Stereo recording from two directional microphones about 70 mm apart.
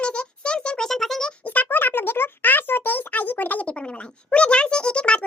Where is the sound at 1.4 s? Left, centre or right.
Left.